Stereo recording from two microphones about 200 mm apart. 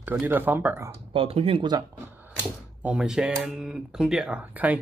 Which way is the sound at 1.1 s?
30° right (ahead or behind).